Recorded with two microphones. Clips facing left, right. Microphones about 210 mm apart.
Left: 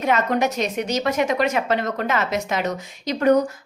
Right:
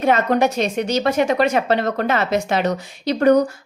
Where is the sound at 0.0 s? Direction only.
30° right (ahead or behind).